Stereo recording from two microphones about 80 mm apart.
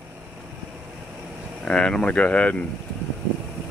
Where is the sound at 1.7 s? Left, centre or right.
Centre.